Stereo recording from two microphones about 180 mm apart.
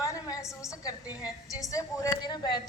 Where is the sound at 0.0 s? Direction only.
15° left (ahead or behind).